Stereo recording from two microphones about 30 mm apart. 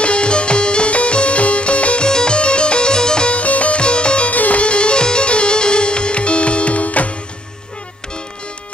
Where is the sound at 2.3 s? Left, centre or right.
Left.